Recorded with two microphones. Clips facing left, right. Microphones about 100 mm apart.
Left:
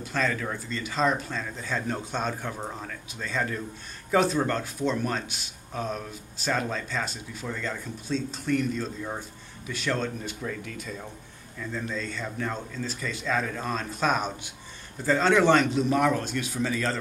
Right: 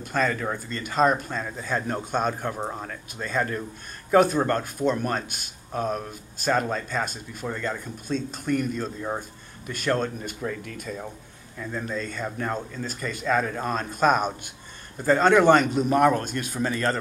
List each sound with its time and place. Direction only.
0.0 s speech: 50° right (ahead or behind)